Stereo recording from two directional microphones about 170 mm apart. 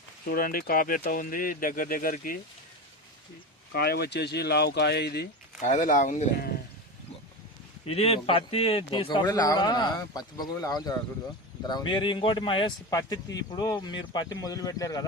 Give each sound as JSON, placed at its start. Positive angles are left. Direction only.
{"t": 0.3, "sound": "speech", "side_deg": 55}
{"t": 3.7, "sound": "speech", "side_deg": 65}
{"t": 5.5, "sound": "speech", "side_deg": 45}
{"t": 7.9, "sound": "a man's voice", "side_deg": 35}